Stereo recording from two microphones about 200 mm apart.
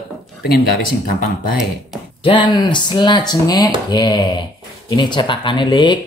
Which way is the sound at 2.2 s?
25° left (ahead or behind).